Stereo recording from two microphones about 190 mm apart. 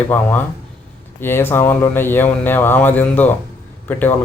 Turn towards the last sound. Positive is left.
turn(degrees=10)  # may be behind; listen again after turning